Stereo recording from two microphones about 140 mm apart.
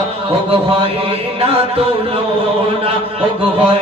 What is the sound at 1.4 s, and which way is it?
Music, 45° right (ahead or behind).